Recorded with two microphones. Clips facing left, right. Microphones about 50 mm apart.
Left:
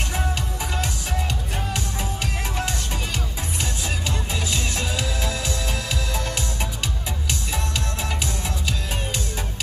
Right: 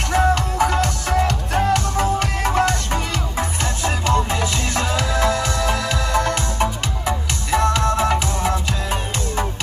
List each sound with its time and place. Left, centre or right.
0.1 s music: right